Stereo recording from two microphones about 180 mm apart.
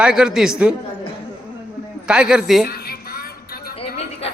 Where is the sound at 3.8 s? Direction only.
35° left (ahead or behind).